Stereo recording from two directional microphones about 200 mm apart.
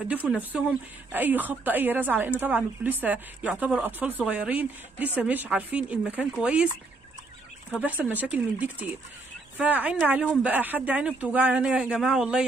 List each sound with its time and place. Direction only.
0.3 s speech: 5° right (ahead or behind)
7.8 s speech: 10° right (ahead or behind)